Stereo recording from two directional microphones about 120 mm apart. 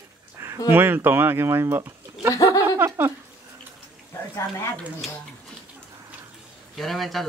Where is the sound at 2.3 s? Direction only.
25° left (ahead or behind).